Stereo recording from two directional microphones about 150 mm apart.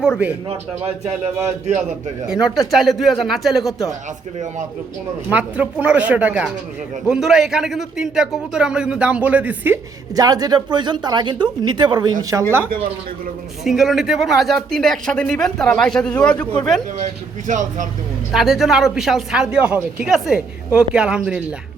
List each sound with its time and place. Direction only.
2.3 s speech: 5° right (ahead or behind)
5.3 s speech: 10° right (ahead or behind)
10.2 s speech: 25° right (ahead or behind)
13.7 s speech: centre (ahead or behind)
17.0 s speech: 55° right (ahead or behind)
18.3 s speech: centre (ahead or behind)